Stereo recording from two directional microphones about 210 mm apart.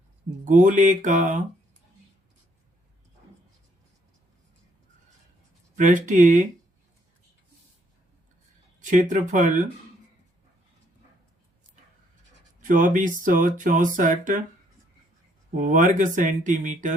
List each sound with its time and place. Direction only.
0.4 s speech: 35° right (ahead or behind)
5.7 s speech: 35° right (ahead or behind)
8.8 s speech: 35° right (ahead or behind)
12.5 s speech: 40° right (ahead or behind)
15.6 s speech: 35° right (ahead or behind)